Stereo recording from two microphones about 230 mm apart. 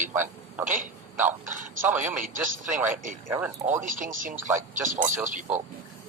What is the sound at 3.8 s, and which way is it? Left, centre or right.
Speech, right.